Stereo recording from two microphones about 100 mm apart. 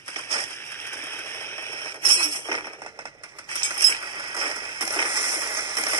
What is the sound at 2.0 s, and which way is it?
Tambourine, 55° right (ahead or behind).